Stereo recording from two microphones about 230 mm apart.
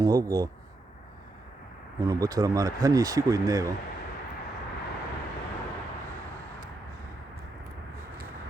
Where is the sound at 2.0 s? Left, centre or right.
Centre.